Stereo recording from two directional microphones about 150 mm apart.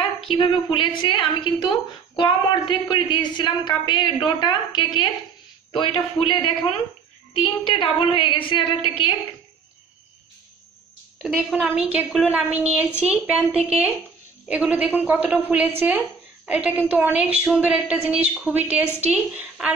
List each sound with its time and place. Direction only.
0.2 s a woman's voice: 35° left (ahead or behind)
7.6 s a woman's voice: 35° left (ahead or behind)
11.2 s a woman's voice: 5° right (ahead or behind)